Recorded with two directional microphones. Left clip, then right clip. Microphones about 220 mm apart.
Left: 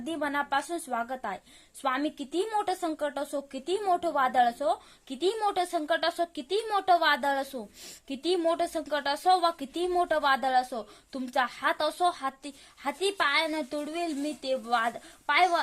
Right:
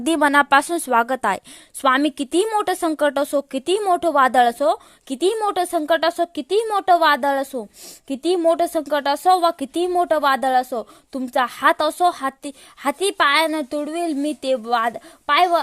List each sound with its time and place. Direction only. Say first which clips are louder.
0.0 s speech: right 15 dB; 45° right (ahead or behind)